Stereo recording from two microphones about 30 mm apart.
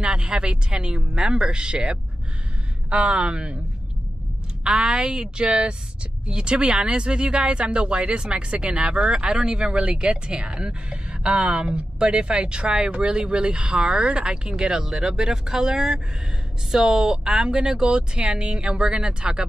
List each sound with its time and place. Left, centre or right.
0.0 s speech: right
4.6 s speech: right
11.3 s speech: right
13.6 s speech: right
14.1 s speech: right
17.5 s speech: right